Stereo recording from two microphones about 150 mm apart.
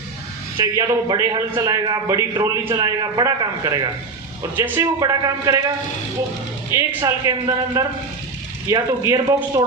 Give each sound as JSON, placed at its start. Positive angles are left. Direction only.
{"t": 0.5, "sound": "a man's voice", "side_deg": -25}